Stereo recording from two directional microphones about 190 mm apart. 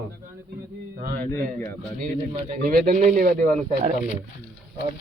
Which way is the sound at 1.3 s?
10° left (ahead or behind).